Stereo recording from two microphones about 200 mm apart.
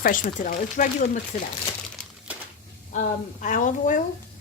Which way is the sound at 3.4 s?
40° left (ahead or behind).